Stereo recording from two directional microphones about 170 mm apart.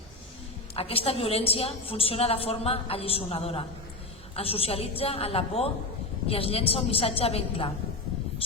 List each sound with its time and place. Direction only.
0.8 s a woman's voice: 35° left (ahead or behind)